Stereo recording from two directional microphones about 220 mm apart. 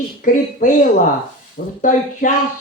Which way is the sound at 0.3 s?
35° left (ahead or behind).